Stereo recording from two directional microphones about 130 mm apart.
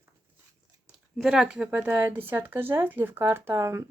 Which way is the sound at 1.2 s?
5° right (ahead or behind).